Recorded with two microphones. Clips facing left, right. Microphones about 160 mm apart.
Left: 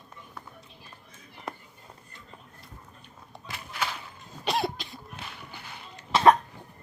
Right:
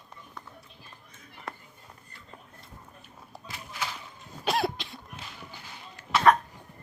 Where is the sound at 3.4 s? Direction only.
65° left (ahead or behind).